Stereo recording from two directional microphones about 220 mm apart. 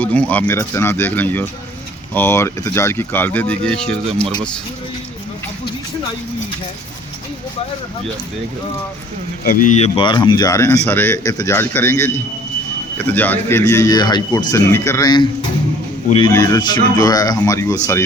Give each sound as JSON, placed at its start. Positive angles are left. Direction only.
{"t": 0.0, "sound": "speech", "side_deg": 5}
{"t": 9.4, "sound": "speech", "side_deg": 40}